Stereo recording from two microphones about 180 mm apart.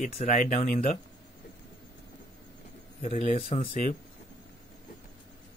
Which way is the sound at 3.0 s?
40° left (ahead or behind).